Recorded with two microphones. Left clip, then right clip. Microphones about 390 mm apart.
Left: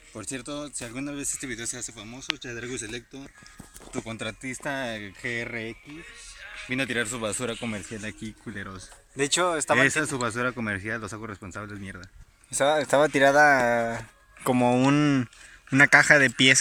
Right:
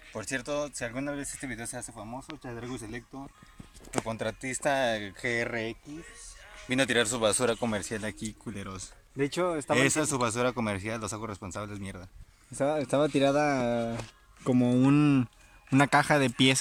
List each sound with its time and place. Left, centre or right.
0.1 s speech: right
4.0 s speech: right
9.1 s speech: left
9.7 s speech: centre
12.5 s speech: left
14.6 s speech: centre